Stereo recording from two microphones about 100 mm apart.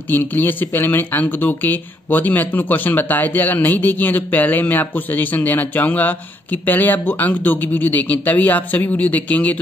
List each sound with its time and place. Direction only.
0.1 s speech: 20° left (ahead or behind)